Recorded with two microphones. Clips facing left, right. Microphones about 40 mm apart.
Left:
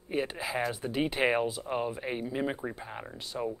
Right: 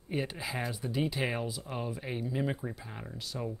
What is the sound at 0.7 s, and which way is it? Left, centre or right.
Speech, left.